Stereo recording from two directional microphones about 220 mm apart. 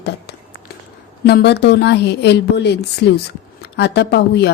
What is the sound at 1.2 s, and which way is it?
A woman's voice, 50° left (ahead or behind).